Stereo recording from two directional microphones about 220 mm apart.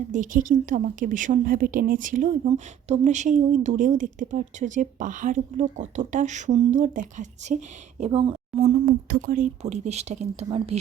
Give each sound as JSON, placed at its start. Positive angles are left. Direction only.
{"t": 0.1, "sound": "a woman's voice", "side_deg": -35}
{"t": 8.9, "sound": "a woman's voice", "side_deg": -40}